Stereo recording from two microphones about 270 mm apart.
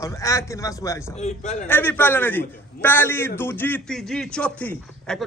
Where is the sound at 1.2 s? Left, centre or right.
Left.